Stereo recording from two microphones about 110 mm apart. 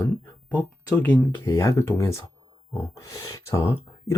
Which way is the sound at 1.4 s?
25° left (ahead or behind).